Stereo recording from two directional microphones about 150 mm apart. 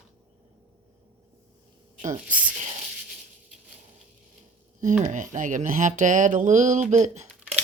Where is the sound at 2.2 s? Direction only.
10° right (ahead or behind).